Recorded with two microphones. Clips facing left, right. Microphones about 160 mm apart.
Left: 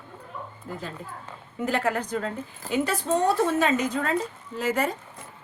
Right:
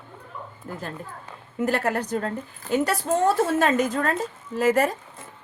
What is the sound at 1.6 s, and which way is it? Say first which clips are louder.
A woman's voice: right 2 dB; 45° right (ahead or behind).